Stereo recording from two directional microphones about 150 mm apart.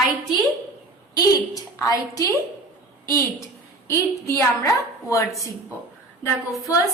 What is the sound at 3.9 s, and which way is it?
A woman's voice, 20° left (ahead or behind).